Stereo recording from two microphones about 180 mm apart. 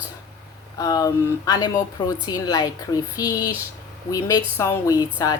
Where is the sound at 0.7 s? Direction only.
20° left (ahead or behind).